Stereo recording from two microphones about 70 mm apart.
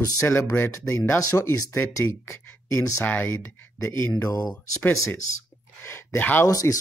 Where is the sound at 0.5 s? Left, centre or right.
Left.